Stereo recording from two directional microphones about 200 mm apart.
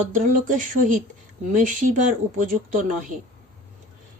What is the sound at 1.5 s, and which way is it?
Speech, 40° right (ahead or behind).